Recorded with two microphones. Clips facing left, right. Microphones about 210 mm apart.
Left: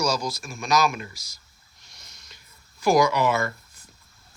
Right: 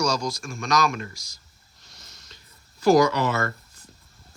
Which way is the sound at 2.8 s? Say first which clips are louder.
Right 2 dB; 10° left (ahead or behind).